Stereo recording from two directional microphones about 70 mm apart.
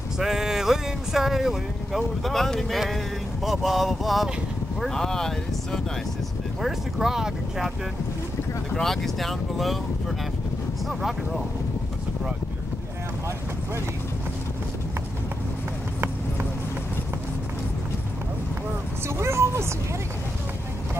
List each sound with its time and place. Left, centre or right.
0.2 s speech: centre
6.6 s speech: centre
8.7 s speech: centre
19.0 s speech: right